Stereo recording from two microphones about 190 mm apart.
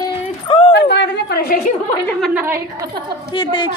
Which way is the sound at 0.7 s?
65° left (ahead or behind).